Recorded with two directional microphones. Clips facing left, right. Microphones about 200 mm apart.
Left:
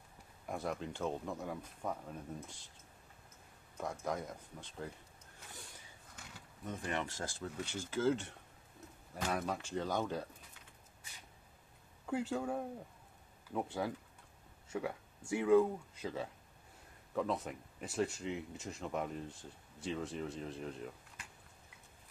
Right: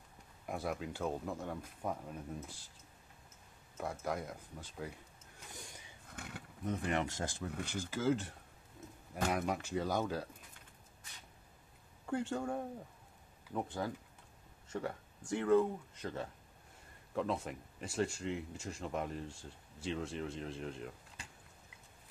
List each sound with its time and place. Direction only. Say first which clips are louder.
0.5 s speech: even; 5° right (ahead or behind)
3.7 s speech: even; 5° right (ahead or behind)
6.1 s a sound: right 8 dB; 60° right (ahead or behind)
7.1 s speech: right 3 dB; 20° right (ahead or behind)
7.9 s speech: left 1 dB; 5° right (ahead or behind)
12.1 s speech: even; 5° left (ahead or behind)